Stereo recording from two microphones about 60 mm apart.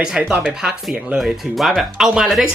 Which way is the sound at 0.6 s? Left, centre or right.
Centre.